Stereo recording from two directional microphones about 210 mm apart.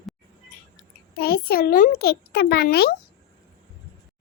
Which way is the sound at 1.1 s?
45° left (ahead or behind).